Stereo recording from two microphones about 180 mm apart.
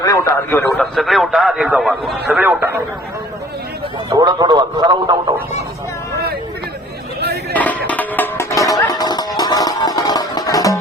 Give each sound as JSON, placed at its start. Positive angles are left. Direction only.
{"t": 0.0, "sound": "a man's voice", "side_deg": 15}
{"t": 0.7, "sound": "speech", "side_deg": 0}
{"t": 2.4, "sound": "a man's voice", "side_deg": -10}
{"t": 4.1, "sound": "a man's voice", "side_deg": -25}
{"t": 7.5, "sound": "music", "side_deg": 10}